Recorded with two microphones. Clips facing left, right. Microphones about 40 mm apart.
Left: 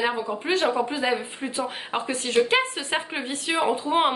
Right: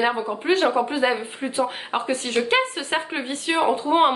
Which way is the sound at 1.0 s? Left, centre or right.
Centre.